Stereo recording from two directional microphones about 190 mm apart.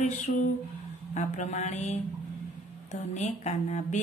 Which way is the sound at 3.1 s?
35° left (ahead or behind).